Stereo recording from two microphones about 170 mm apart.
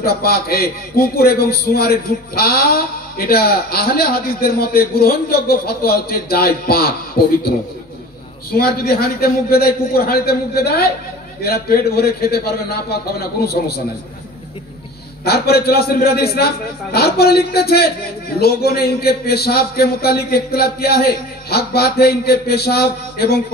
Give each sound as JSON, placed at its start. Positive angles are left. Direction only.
{"t": 0.0, "sound": "a man's voice", "side_deg": 65}
{"t": 15.2, "sound": "a man's voice", "side_deg": 65}